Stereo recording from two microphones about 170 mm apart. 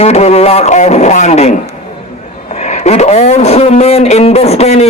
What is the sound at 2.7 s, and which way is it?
Speech, 40° left (ahead or behind).